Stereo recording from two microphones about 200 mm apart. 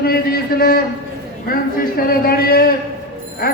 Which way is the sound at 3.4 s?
50° left (ahead or behind).